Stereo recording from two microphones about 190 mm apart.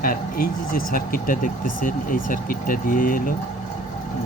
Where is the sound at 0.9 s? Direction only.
50° left (ahead or behind).